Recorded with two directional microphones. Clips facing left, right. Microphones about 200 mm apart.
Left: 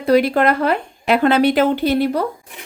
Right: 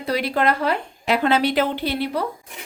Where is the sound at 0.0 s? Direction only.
50° left (ahead or behind).